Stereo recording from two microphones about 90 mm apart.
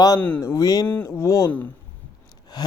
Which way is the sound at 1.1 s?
30° left (ahead or behind).